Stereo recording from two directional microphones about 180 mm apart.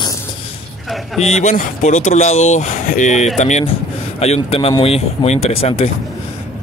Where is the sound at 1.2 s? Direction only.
40° left (ahead or behind).